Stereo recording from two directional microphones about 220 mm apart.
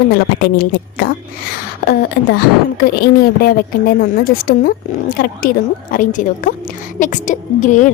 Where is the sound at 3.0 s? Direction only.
40° left (ahead or behind).